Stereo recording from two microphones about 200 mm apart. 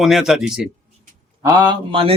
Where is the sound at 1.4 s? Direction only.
20° right (ahead or behind).